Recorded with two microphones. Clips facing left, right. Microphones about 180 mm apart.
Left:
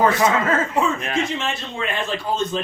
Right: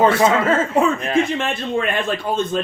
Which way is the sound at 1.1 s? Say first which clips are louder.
Right 5 dB; 55° right (ahead or behind).